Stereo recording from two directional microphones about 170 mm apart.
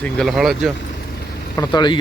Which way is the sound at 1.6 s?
25° left (ahead or behind).